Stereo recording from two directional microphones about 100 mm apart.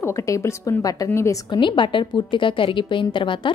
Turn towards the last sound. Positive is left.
turn(degrees=55)  # may be behind; listen again after turning